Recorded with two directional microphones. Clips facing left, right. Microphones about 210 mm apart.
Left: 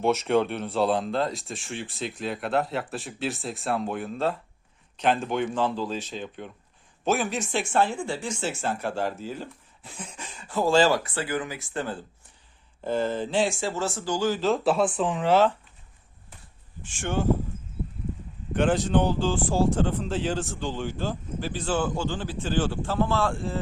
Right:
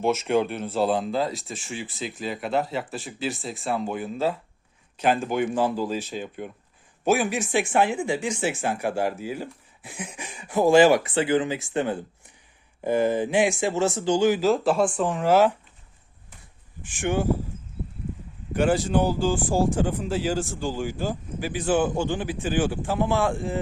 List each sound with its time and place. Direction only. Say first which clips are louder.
0.0 s speech: even; centre (ahead or behind)
14.6 s speech: right 1 dB; 5° left (ahead or behind)
17.0 s speech: right 3 dB; 15° right (ahead or behind)
18.5 s speech: right 1 dB; 10° right (ahead or behind)